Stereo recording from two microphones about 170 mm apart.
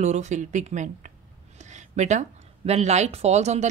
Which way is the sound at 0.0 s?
40° right (ahead or behind).